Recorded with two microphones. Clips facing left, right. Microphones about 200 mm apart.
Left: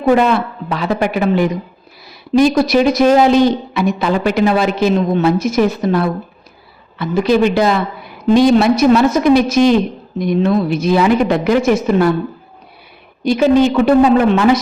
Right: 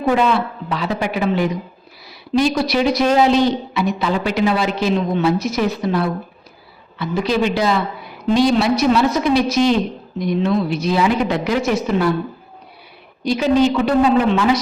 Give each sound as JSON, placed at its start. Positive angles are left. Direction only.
{"t": 0.1, "sound": "speech", "side_deg": 50}
{"t": 13.2, "sound": "speech", "side_deg": 55}